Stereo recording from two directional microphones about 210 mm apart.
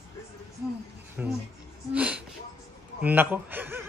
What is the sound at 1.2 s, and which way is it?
Speech, 5° right (ahead or behind).